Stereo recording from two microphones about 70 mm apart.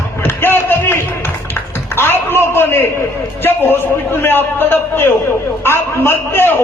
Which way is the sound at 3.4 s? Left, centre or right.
Left.